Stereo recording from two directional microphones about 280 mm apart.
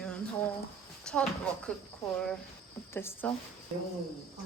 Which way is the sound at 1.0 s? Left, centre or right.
Centre.